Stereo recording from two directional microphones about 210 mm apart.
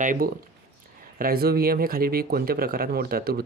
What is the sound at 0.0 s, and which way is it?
Speech, 40° right (ahead or behind).